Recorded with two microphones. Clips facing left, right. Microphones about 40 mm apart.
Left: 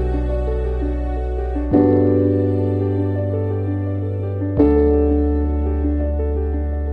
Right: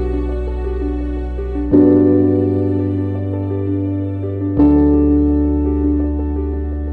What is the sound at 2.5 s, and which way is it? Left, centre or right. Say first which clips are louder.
Music: right 3 dB; left.